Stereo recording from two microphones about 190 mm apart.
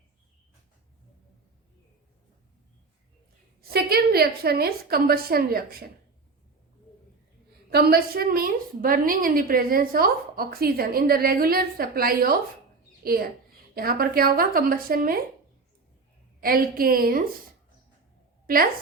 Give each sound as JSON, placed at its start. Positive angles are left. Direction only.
{"t": 3.6, "sound": "a woman's voice", "side_deg": -55}
{"t": 7.7, "sound": "a woman's voice", "side_deg": -55}
{"t": 16.4, "sound": "a woman's voice", "side_deg": -50}
{"t": 18.4, "sound": "a woman's voice", "side_deg": -50}